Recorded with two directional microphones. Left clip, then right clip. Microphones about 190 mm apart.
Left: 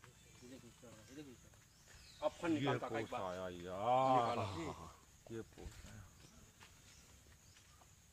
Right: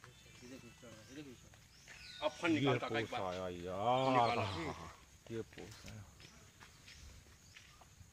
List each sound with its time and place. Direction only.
1.2 s speech: 5° left (ahead or behind)
2.1 s speech: 25° left (ahead or behind)
3.3 s speech: 90° right
4.4 s speech: 15° right (ahead or behind)